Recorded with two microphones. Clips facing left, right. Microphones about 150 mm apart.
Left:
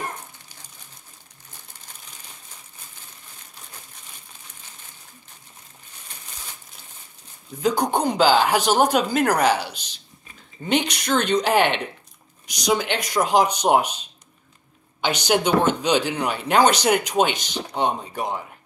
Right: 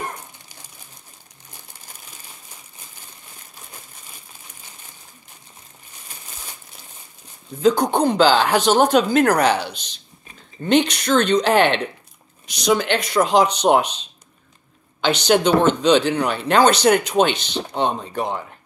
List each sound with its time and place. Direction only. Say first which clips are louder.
7.6 s speech: right 4 dB; 10° left (ahead or behind)